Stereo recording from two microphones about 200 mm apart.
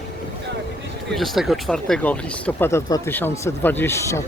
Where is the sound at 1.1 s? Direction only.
Centre (ahead or behind).